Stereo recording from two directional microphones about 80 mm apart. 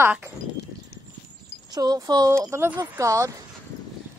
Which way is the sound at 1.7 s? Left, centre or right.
Right.